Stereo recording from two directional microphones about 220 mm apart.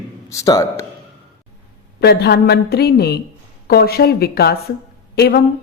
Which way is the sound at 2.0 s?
50° left (ahead or behind).